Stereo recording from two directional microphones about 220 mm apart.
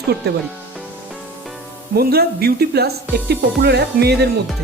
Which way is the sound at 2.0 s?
45° right (ahead or behind).